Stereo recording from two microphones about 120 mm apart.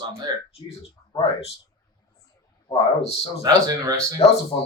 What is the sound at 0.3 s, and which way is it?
Speech, 35° right (ahead or behind).